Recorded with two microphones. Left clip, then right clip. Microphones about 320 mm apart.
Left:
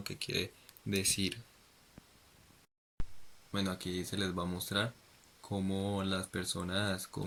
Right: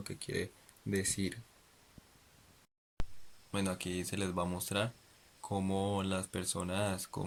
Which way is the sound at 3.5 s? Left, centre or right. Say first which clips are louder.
Even; centre.